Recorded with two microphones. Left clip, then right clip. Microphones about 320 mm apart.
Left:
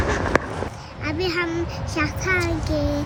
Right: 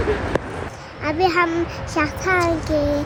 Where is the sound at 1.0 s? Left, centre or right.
Centre.